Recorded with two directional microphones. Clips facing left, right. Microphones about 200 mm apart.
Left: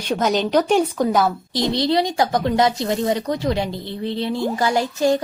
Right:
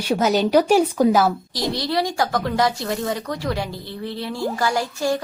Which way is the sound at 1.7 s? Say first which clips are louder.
Left 3 dB; 20° left (ahead or behind).